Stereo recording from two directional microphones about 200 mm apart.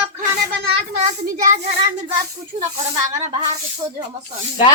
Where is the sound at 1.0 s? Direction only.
40° right (ahead or behind).